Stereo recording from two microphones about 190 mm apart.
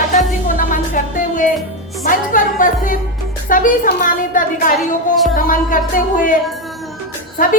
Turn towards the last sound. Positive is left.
turn(degrees=45)  # may be behind; listen again after turning